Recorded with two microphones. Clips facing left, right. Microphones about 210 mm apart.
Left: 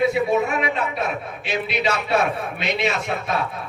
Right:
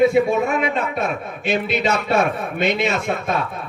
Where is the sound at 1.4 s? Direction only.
45° right (ahead or behind).